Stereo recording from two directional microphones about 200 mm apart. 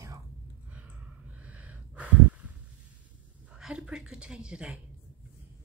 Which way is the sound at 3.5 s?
5° right (ahead or behind).